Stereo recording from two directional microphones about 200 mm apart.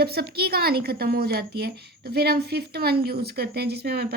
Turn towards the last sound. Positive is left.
turn(degrees=-55)  # may be behind; listen again after turning